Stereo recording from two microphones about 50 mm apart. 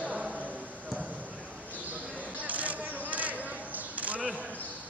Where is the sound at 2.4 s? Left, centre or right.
Right.